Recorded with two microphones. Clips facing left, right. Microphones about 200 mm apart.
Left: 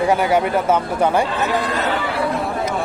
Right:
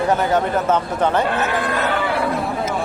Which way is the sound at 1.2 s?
60° right (ahead or behind).